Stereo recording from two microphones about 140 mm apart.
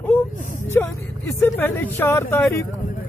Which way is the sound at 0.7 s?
15° left (ahead or behind).